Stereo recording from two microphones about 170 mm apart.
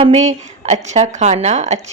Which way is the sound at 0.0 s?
40° right (ahead or behind).